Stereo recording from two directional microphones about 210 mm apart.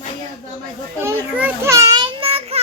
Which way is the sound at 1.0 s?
10° right (ahead or behind).